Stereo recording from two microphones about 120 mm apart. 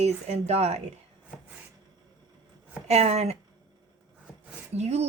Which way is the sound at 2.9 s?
65° right (ahead or behind).